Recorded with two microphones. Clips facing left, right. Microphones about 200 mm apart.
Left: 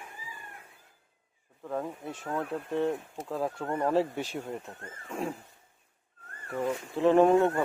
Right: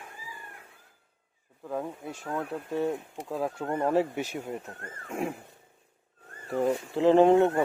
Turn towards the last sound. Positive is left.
turn(degrees=-25)  # may be behind; listen again after turning